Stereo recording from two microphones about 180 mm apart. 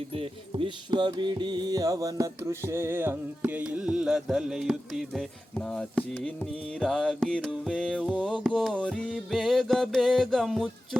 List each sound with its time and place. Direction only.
0.1 s music: 30° right (ahead or behind); by 10.7 s centre (ahead or behind)